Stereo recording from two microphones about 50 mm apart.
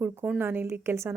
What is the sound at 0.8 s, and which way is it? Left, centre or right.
Speech, right.